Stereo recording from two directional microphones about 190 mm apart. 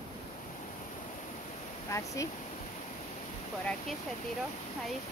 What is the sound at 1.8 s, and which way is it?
Speech, 15° left (ahead or behind).